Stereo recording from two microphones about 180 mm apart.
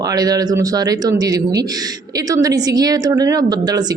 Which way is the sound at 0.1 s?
20° right (ahead or behind).